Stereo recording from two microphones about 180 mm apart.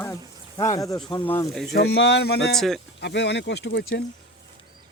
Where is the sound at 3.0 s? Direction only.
75° left (ahead or behind).